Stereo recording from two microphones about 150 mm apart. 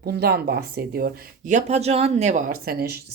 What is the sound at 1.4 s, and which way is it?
Speech, 50° right (ahead or behind).